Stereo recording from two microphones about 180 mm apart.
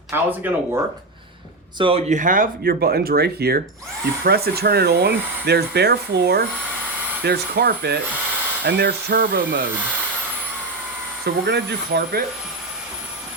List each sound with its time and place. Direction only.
0.1 s speech: 10° right (ahead or behind)
1.8 s speech: 30° right (ahead or behind); by 9.6 s 60° right (ahead or behind)
11.4 s speech: 70° right (ahead or behind)